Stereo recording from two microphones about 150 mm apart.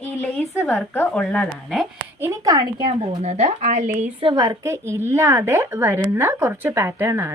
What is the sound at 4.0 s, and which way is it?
A woman's voice, 40° right (ahead or behind).